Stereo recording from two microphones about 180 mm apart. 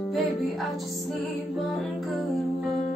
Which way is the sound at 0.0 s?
Centre (ahead or behind).